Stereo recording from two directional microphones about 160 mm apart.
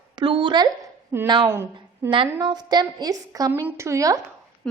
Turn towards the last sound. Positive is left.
turn(degrees=-20)  # may be behind; listen again after turning